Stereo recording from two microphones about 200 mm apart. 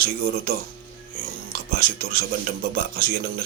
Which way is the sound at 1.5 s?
50° right (ahead or behind).